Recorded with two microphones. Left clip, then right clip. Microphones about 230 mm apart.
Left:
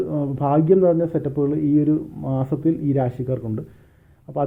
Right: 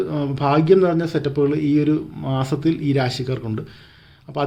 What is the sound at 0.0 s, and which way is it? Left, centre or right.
A man's voice, centre.